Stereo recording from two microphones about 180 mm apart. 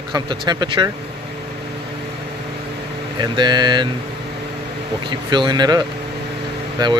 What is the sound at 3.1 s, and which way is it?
Speech, 25° right (ahead or behind).